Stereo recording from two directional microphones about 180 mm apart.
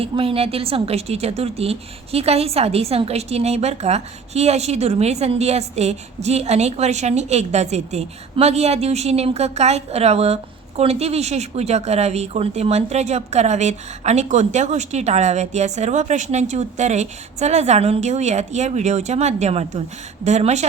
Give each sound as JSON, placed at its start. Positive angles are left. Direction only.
{"t": 0.0, "sound": "a woman's voice", "side_deg": -30}